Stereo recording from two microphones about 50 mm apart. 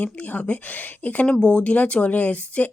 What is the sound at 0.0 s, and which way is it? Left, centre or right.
Speech, left.